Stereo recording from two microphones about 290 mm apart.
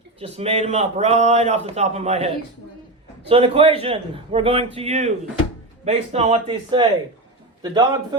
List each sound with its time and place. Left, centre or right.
0.2 s a man's voice: right